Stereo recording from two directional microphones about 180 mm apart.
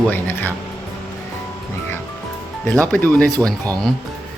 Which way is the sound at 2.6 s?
5° left (ahead or behind).